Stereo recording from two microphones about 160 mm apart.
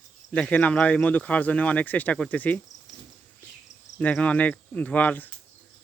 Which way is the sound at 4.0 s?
10° left (ahead or behind).